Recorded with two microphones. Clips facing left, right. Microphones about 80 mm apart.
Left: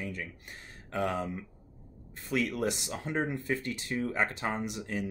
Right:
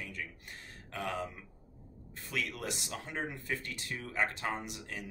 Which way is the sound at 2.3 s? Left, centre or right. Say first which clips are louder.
Left 8 dB; left.